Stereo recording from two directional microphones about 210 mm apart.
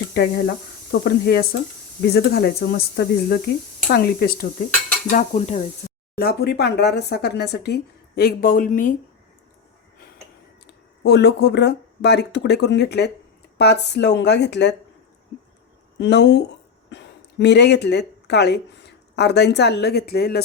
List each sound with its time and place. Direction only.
0.1 s speech: 45° left (ahead or behind)
5.0 s dishes: 35° left (ahead or behind)
6.1 s speech: 50° left (ahead or behind)
11.0 s speech: 55° left (ahead or behind)
16.0 s speech: 55° left (ahead or behind)